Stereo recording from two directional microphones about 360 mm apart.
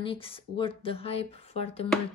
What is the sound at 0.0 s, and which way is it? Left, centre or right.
Speech, centre.